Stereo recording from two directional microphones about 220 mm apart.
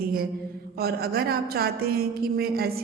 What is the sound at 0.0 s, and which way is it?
A woman's voice, 40° right (ahead or behind).